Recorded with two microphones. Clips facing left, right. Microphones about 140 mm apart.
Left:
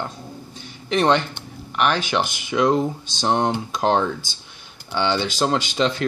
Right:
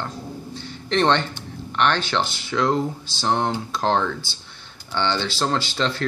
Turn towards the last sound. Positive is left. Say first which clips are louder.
# left 3 dB
turn(degrees=15)  # may be behind; listen again after turning